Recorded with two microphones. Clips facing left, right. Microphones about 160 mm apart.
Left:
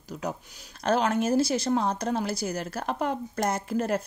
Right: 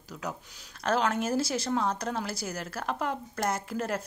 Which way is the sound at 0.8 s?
20° left (ahead or behind).